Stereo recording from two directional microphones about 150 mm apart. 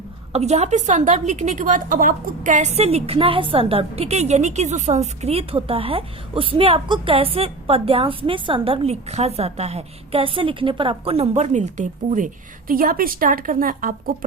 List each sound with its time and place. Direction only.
0.3 s a woman's voice: 45° right (ahead or behind); by 14.3 s 65° right (ahead or behind)